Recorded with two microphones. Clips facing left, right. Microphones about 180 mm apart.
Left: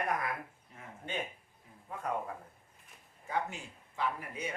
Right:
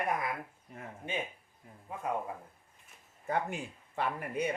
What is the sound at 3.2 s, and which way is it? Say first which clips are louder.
Speech: right 3 dB; 55° right (ahead or behind).